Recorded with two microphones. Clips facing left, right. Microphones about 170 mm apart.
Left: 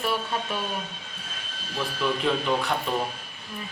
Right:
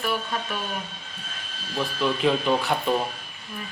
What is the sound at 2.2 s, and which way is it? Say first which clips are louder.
Speech: right 4 dB; 5° right (ahead or behind).